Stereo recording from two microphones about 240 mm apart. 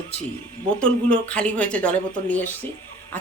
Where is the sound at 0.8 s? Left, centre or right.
Centre.